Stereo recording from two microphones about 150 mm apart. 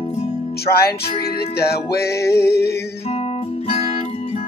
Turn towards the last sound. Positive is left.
turn(degrees=40)  # may be behind; listen again after turning